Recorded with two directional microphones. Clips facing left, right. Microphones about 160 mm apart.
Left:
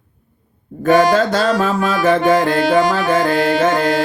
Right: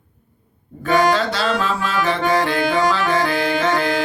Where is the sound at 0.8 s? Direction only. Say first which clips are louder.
Left 5 dB; 45° left (ahead or behind).